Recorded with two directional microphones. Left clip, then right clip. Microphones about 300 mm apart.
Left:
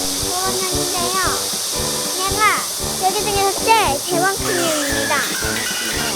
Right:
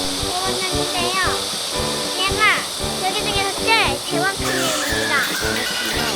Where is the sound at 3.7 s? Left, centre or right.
Left.